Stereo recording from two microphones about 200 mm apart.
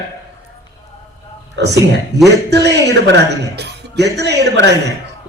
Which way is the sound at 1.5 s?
60° right (ahead or behind).